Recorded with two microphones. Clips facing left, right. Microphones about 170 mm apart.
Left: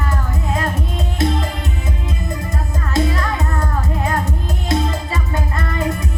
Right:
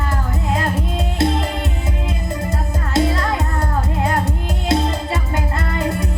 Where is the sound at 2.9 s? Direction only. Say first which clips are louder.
Right 1 dB; 30° right (ahead or behind).